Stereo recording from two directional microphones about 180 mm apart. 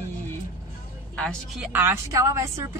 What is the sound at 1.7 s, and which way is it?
A woman's voice, 10° right (ahead or behind).